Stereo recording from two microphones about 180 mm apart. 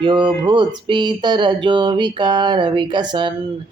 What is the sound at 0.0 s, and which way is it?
Speech, 25° right (ahead or behind).